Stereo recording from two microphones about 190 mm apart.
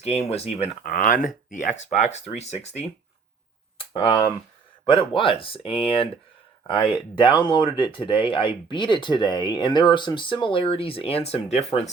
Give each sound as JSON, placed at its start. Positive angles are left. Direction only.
{"t": 0.0, "sound": "speech", "side_deg": 35}
{"t": 0.8, "sound": "speech", "side_deg": 45}